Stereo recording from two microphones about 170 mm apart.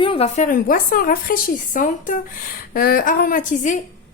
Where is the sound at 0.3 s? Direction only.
50° left (ahead or behind).